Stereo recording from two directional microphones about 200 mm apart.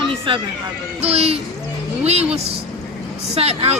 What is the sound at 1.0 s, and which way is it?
A man's voice, 30° right (ahead or behind).